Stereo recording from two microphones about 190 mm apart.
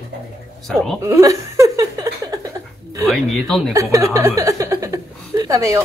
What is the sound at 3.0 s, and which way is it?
Speech, centre (ahead or behind).